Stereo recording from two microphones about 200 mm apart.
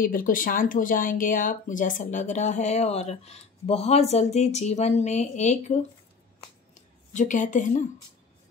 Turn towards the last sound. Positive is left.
turn(degrees=40)  # may be behind; listen again after turning